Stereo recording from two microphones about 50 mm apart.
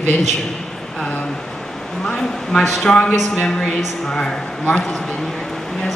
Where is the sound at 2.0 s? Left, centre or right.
Centre.